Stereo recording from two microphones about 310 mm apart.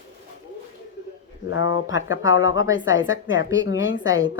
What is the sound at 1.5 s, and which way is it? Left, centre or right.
Speech, left.